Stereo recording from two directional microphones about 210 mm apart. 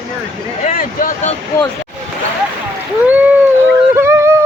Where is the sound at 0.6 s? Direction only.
40° left (ahead or behind).